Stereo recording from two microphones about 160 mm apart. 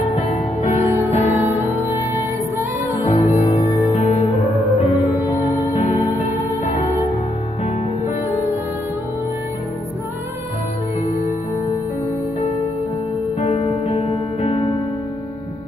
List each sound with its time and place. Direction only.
1.1 s music: 45° left (ahead or behind)
3.0 s music: 45° left (ahead or behind)
5.5 s music: 50° left (ahead or behind)
13.4 s music: 40° left (ahead or behind)